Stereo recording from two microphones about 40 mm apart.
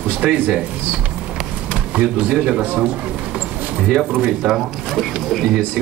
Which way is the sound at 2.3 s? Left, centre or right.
Centre.